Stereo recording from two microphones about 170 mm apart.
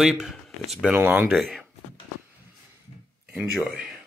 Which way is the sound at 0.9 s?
15° right (ahead or behind).